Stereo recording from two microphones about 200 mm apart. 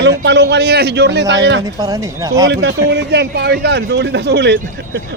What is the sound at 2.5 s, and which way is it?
Speech, 55° right (ahead or behind).